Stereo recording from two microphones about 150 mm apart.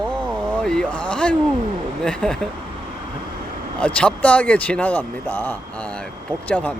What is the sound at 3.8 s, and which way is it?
Speech, 10° left (ahead or behind).